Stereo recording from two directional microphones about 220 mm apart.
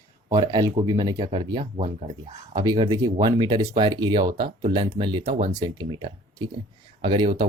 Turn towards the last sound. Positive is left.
turn(degrees=-20)  # may be behind; listen again after turning